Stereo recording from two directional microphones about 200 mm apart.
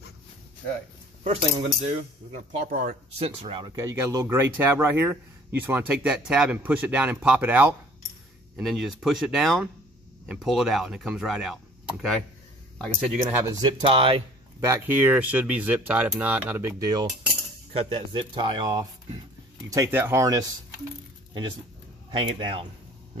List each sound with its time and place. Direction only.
1.2 s speech: 30° right (ahead or behind)
3.2 s speech: 30° right (ahead or behind)
3.9 s speech: 15° right (ahead or behind)
13.3 s speech: 15° right (ahead or behind)
14.6 s speech: 10° right (ahead or behind)
17.7 s speech: 30° right (ahead or behind)